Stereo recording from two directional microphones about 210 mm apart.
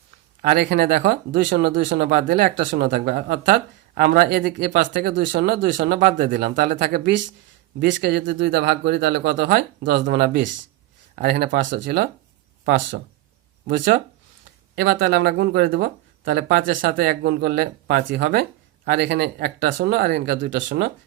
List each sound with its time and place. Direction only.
0.4 s speech: 50° right (ahead or behind)
13.7 s speech: 40° right (ahead or behind)